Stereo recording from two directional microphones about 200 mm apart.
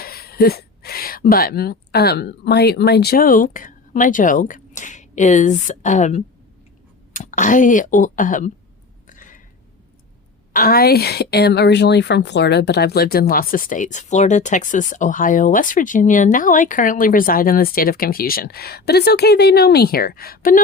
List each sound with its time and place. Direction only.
0.0 s speech: 50° left (ahead or behind)
9.0 s a sound: 40° left (ahead or behind)
10.5 s a woman's voice: 45° left (ahead or behind)